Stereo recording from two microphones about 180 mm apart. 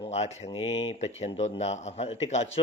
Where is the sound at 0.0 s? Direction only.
35° left (ahead or behind).